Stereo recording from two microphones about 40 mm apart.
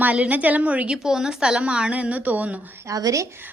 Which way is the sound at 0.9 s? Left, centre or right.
Centre.